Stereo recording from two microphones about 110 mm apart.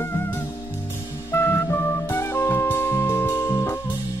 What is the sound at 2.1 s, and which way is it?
Music, 20° left (ahead or behind).